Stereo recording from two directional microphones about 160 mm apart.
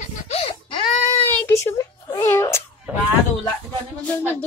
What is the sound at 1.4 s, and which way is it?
Cat, 15° left (ahead or behind).